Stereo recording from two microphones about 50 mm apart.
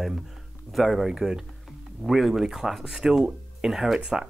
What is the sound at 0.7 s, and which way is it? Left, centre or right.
Speech, centre.